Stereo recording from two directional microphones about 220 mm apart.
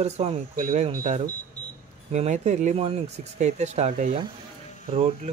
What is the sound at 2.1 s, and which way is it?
Speech, 30° right (ahead or behind).